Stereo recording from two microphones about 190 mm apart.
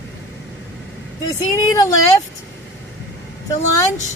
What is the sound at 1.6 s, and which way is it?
Speech, 15° left (ahead or behind).